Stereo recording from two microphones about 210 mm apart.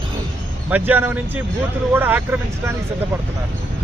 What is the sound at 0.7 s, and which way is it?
Speech, 10° right (ahead or behind).